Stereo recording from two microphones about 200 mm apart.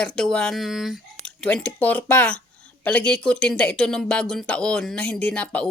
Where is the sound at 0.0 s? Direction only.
5° left (ahead or behind).